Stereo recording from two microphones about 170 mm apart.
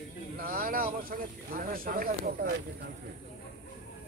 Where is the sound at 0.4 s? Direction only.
55° right (ahead or behind).